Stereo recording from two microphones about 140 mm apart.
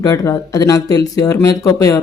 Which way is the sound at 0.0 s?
25° left (ahead or behind).